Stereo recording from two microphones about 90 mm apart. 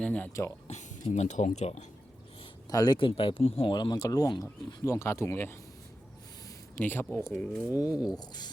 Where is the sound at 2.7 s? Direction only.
45° left (ahead or behind).